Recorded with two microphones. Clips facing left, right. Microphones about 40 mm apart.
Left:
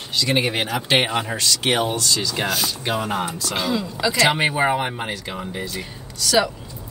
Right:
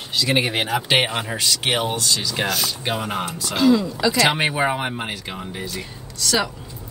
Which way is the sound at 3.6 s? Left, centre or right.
Centre.